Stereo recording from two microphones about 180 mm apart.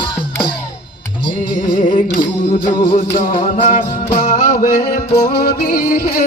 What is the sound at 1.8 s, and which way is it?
Music, 45° left (ahead or behind).